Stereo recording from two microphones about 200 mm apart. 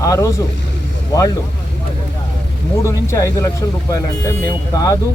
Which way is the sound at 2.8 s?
15° left (ahead or behind).